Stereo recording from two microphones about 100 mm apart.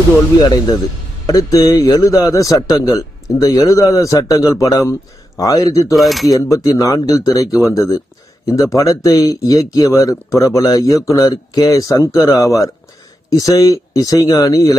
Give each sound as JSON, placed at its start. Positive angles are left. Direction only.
{"t": 1.2, "sound": "speech", "side_deg": 35}
{"t": 5.9, "sound": "speech", "side_deg": 0}
{"t": 6.3, "sound": "speech", "side_deg": 35}